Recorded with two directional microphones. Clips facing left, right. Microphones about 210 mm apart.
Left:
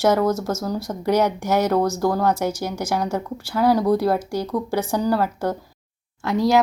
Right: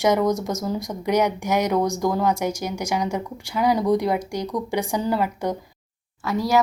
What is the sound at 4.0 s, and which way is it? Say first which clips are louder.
Speech: left 2 dB; 15° right (ahead or behind).